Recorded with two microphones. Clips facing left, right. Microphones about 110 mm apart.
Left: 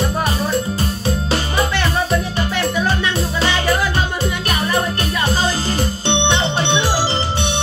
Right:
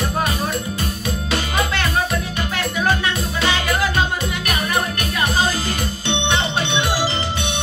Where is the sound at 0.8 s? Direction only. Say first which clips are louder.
Left 4 dB; 30° left (ahead or behind).